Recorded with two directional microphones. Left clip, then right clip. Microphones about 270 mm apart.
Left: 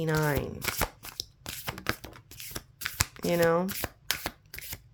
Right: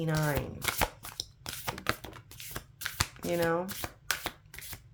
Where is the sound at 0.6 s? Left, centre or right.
Centre.